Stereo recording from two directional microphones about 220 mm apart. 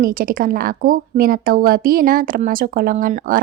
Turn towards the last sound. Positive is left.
turn(degrees=-35)  # may be behind; listen again after turning